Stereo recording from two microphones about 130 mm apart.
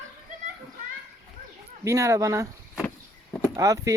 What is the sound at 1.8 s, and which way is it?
Speech, 25° right (ahead or behind).